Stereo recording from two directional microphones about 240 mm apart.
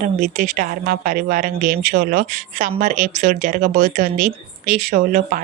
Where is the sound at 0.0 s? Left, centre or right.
Right.